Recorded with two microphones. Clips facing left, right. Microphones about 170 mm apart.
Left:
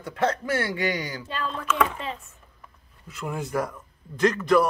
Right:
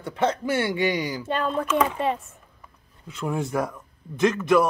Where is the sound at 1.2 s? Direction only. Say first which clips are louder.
Right 6 dB; 50° right (ahead or behind).